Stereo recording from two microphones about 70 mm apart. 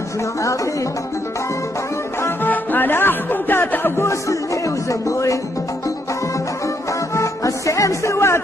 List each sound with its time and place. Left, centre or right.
2.4 s music: left
7.2 s music: left